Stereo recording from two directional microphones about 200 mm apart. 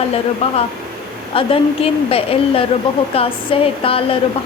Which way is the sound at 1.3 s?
25° left (ahead or behind).